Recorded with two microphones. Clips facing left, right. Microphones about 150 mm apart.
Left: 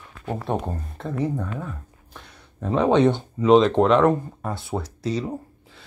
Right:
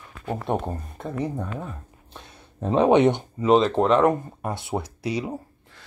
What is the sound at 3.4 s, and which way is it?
Speech, 5° right (ahead or behind).